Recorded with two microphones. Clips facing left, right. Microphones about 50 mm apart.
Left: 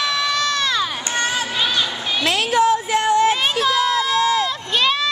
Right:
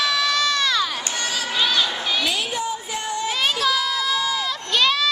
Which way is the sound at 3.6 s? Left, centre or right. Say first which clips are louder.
Left 4 dB; left.